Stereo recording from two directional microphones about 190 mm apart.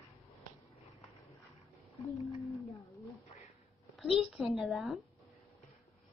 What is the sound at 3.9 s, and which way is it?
A woman's voice, centre (ahead or behind).